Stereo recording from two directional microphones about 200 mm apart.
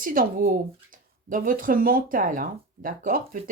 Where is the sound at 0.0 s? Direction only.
45° right (ahead or behind).